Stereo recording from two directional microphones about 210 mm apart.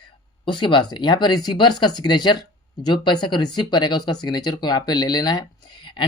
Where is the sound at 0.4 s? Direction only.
20° left (ahead or behind).